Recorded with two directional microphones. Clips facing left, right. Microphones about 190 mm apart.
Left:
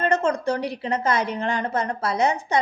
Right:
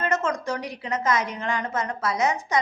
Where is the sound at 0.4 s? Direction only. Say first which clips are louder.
Left 5 dB; 30° left (ahead or behind).